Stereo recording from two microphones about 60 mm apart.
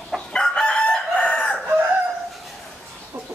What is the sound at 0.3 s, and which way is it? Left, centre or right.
Chicken, centre.